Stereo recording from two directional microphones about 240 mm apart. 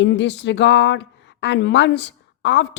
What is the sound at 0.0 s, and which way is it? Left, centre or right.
A woman's voice, left.